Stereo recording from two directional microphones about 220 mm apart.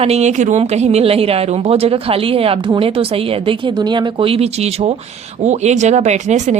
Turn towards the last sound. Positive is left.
turn(degrees=-30)  # may be behind; listen again after turning